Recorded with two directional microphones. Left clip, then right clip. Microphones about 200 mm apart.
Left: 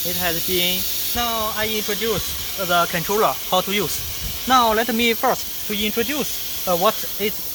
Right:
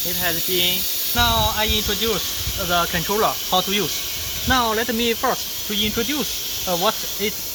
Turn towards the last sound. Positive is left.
turn(degrees=40)  # may be behind; listen again after turning